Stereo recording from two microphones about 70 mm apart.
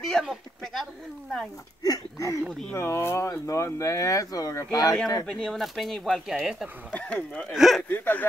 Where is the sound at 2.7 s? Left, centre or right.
Left.